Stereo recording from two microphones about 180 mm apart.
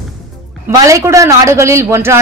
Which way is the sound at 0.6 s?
15° right (ahead or behind).